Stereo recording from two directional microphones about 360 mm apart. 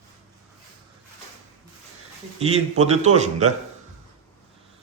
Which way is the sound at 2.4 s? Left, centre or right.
Centre.